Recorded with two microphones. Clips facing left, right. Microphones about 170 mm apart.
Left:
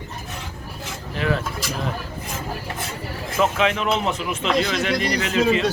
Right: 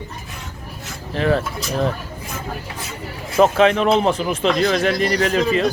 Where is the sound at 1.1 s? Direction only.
35° right (ahead or behind).